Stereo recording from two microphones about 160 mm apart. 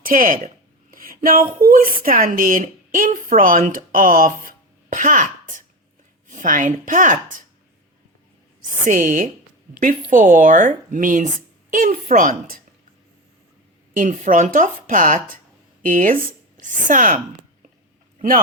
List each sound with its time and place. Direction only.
0.0 s a woman's voice: 60° right (ahead or behind)
8.8 s a woman's voice: 55° right (ahead or behind)
13.9 s a woman's voice: 55° right (ahead or behind)